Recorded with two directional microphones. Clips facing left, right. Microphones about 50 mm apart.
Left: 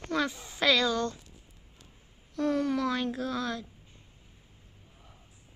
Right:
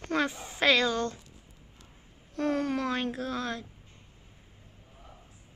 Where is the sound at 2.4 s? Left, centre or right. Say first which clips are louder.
Left 1 dB; right.